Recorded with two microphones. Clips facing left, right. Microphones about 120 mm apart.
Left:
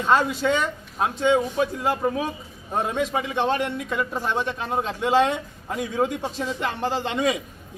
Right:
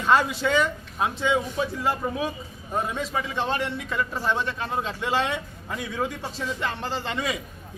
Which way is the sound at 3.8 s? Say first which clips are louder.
Left 1 dB; 15° left (ahead or behind).